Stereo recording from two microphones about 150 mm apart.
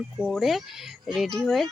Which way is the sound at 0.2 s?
Centre (ahead or behind).